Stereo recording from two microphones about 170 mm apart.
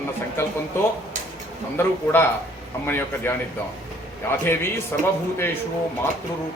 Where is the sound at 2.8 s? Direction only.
10° left (ahead or behind).